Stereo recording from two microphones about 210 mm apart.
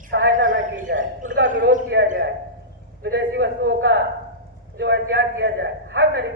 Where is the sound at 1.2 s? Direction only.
40° right (ahead or behind).